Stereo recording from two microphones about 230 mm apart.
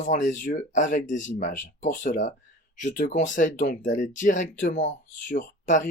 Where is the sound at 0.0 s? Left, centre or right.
Left.